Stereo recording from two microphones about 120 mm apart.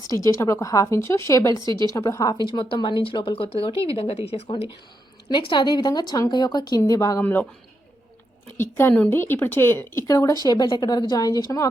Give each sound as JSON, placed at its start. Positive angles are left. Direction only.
{"t": 0.1, "sound": "speech", "side_deg": 25}
{"t": 1.6, "sound": "a woman's voice", "side_deg": -40}
{"t": 1.9, "sound": "a woman's voice", "side_deg": 25}
{"t": 5.3, "sound": "a woman's voice", "side_deg": 40}
{"t": 7.2, "sound": "speech", "side_deg": 15}
{"t": 8.8, "sound": "speech", "side_deg": 15}
{"t": 10.4, "sound": "a woman's voice", "side_deg": 35}